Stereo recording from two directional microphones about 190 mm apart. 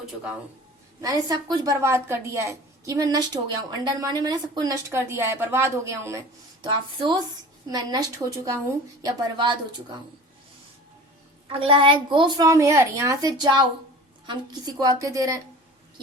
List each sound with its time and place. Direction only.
0.0 s speech: 5° right (ahead or behind)
1.0 s a woman's voice: 20° right (ahead or behind)
11.4 s a woman's voice: 30° right (ahead or behind)